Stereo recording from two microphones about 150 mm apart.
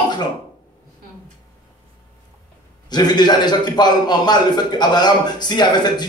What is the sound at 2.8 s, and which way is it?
Speech, 30° left (ahead or behind).